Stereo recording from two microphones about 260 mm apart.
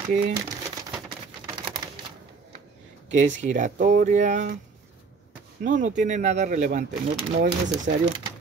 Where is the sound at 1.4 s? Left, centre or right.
Centre.